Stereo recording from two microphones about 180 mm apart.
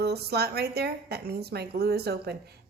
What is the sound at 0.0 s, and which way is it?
A woman's voice, 65° right (ahead or behind).